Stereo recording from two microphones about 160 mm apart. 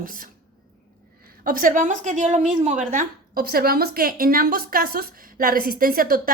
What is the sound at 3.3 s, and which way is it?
A woman's voice, 70° right (ahead or behind).